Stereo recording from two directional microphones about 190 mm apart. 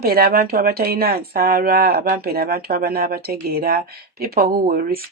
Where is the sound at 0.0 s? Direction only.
55° right (ahead or behind).